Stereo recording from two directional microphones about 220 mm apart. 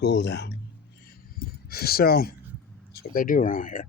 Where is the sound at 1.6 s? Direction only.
45° left (ahead or behind).